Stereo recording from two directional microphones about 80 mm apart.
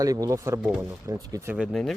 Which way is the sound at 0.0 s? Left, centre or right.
Right.